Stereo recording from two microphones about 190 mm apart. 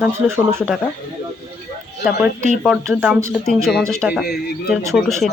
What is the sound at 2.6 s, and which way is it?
Speech, 5° right (ahead or behind).